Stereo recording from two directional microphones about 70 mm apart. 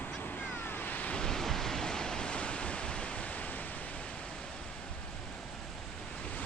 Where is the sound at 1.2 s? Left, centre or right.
Centre.